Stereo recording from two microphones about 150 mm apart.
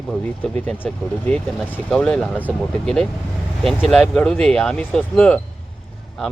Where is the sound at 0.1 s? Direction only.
5° left (ahead or behind).